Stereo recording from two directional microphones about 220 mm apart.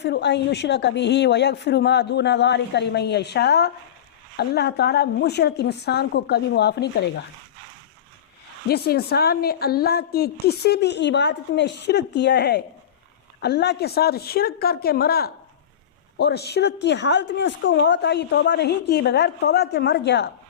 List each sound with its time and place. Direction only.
0.0 s a woman's voice: 50° left (ahead or behind)
8.7 s a woman's voice: 45° left (ahead or behind)